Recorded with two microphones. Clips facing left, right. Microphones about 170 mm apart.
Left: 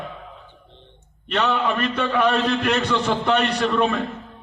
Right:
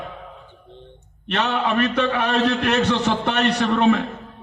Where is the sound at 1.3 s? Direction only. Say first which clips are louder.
Even; 75° right (ahead or behind).